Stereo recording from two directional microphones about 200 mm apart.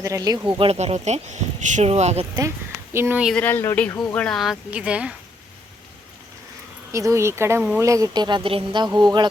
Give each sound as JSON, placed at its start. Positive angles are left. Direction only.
{"t": 0.0, "sound": "speech", "side_deg": -15}
{"t": 2.9, "sound": "a woman's voice", "side_deg": -10}
{"t": 3.3, "sound": "speech", "side_deg": 10}
{"t": 6.9, "sound": "a woman's voice", "side_deg": -15}